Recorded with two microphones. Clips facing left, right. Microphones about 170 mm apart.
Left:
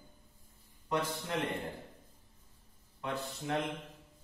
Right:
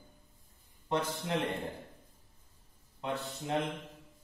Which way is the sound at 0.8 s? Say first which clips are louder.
Right 1 dB; 20° right (ahead or behind).